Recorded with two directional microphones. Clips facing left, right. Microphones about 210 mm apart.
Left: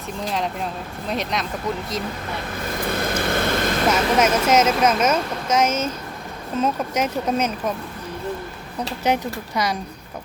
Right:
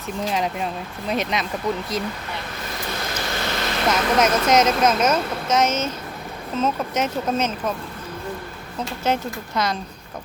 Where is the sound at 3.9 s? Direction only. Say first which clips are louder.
Right 1 dB; 10° left (ahead or behind).